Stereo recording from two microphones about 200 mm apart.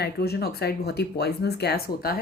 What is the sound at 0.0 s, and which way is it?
A woman's voice, 55° left (ahead or behind).